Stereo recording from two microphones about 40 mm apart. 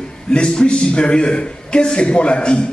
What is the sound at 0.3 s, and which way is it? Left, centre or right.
A man's voice, left.